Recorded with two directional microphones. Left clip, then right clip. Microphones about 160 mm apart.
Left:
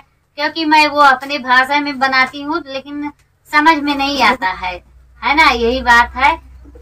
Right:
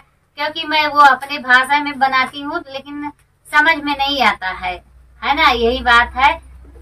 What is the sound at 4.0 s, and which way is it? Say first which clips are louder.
Child singing: left 2 dB; 15° right (ahead or behind).